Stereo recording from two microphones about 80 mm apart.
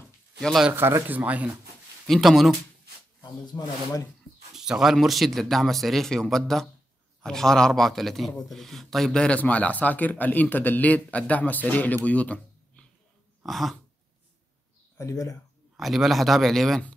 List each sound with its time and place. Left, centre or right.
0.4 s speech: centre
1.0 s speech: right
2.0 s speech: centre
3.2 s speech: left
4.6 s a man's voice: centre
13.5 s speech: centre
15.0 s speech: left
15.8 s speech: centre